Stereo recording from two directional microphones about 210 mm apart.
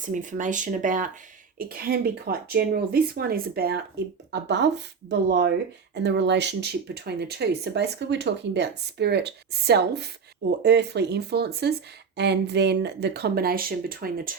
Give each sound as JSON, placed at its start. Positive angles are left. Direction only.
{"t": 0.0, "sound": "speech", "side_deg": -35}